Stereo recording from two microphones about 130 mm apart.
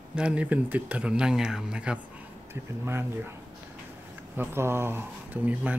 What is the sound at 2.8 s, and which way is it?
Speech, 20° right (ahead or behind).